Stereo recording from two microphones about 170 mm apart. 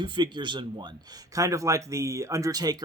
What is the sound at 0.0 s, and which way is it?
A man's voice, 30° right (ahead or behind).